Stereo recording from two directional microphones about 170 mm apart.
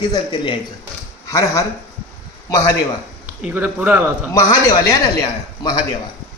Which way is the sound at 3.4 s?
10° right (ahead or behind).